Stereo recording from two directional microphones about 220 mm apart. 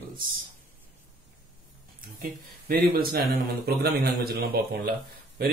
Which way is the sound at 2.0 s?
45° right (ahead or behind).